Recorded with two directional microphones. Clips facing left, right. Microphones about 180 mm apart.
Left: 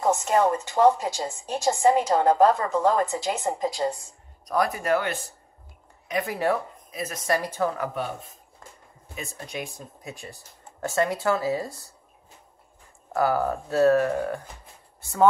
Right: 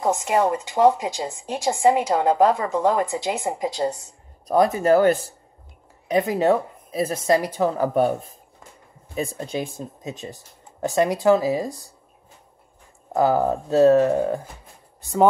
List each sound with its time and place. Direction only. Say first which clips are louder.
0.0 s a woman's voice: right 1 dB; 15° right (ahead or behind)
4.5 s speech: right 6 dB; 25° right (ahead or behind)
6.0 s a woman's voice: right 6 dB; 25° right (ahead or behind)
7.3 s a woman's voice: right 4 dB; 15° right (ahead or behind)
7.9 s a man's voice: right 11 dB; 45° right (ahead or behind)
9.1 s speech: right 9 dB; 30° right (ahead or behind)
13.1 s speech: right 4 dB; 20° right (ahead or behind)